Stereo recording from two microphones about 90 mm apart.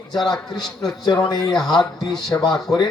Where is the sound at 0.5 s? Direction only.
50° left (ahead or behind).